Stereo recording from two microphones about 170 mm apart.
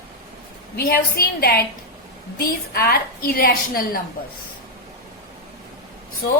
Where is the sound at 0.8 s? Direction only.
60° left (ahead or behind).